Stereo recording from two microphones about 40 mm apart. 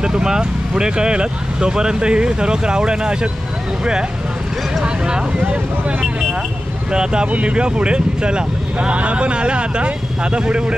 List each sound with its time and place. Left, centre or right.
0.0 s speech: centre
4.8 s speech: right